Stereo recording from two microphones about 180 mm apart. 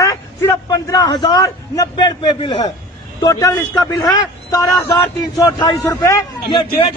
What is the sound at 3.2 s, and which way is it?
A man's voice, 20° left (ahead or behind).